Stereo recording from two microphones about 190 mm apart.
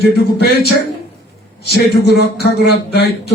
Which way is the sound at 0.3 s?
60° left (ahead or behind).